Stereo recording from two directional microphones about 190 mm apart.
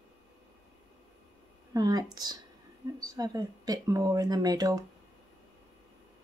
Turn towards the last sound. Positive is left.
turn(degrees=-20)  # may be behind; listen again after turning